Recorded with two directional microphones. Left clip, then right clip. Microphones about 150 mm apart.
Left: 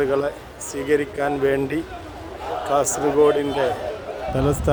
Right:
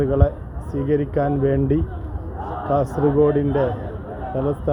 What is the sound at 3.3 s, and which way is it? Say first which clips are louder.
Speech: even; 10° left (ahead or behind).